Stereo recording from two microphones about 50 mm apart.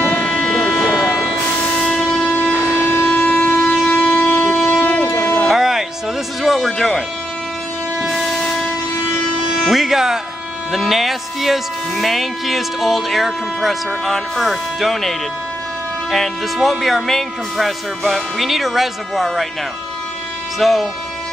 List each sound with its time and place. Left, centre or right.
0.0 s vehicle: left; by 1.4 s centre
1.8 s train: centre
2.0 s train: centre
2.5 s a sound: left
3.1 s train: left
3.6 s train: centre
5.0 s music: left
5.5 s music: centre
8.1 s train: centre
9.5 s music: centre
10.7 s speech: centre
20.5 s speech: centre